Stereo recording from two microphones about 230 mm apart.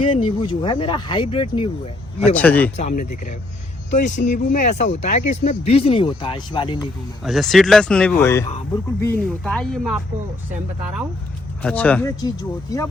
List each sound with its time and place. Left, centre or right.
0.0 s speech: left
2.3 s speech: centre
2.7 s speech: left
7.3 s speech: centre
11.6 s speech: centre